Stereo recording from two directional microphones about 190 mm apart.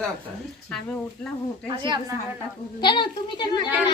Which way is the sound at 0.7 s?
5° left (ahead or behind).